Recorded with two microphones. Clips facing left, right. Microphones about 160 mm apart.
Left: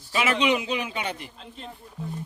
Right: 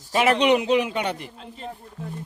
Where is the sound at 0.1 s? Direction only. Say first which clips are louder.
Right 6 dB; 45° right (ahead or behind).